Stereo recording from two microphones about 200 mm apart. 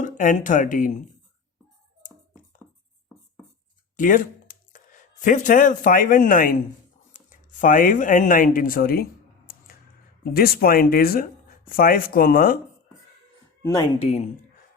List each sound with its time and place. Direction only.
0.0 s speech: 40° left (ahead or behind)
3.9 s speech: 40° left (ahead or behind)
10.3 s speech: 50° left (ahead or behind)
14.0 s speech: 35° left (ahead or behind)